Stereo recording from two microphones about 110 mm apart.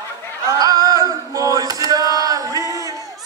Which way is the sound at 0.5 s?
35° right (ahead or behind).